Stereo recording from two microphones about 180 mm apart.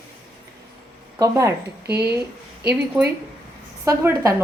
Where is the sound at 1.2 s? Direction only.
15° right (ahead or behind).